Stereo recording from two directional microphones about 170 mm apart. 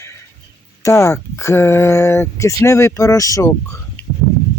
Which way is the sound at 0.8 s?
20° left (ahead or behind).